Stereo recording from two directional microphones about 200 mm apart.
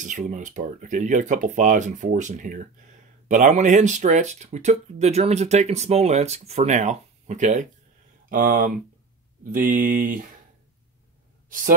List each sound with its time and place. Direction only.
0.0 s speech: 40° right (ahead or behind)
11.4 s speech: 40° right (ahead or behind)